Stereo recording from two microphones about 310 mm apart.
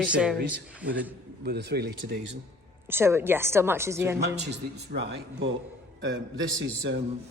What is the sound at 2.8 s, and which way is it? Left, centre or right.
A woman's voice, centre.